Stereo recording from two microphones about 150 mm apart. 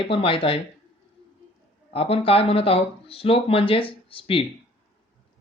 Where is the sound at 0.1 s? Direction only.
40° left (ahead or behind).